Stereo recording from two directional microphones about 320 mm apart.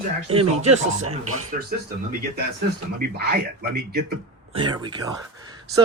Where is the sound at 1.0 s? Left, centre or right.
Right.